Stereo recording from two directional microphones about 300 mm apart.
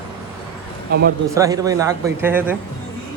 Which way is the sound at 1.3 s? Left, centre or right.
Centre.